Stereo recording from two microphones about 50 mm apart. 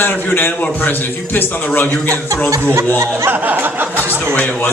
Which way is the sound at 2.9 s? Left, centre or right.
Right.